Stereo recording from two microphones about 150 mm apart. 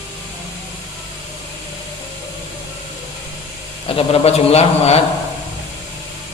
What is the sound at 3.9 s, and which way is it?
A man's voice, 40° left (ahead or behind).